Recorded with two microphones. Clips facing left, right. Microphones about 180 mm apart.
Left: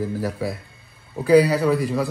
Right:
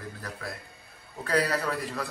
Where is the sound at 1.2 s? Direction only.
Centre (ahead or behind).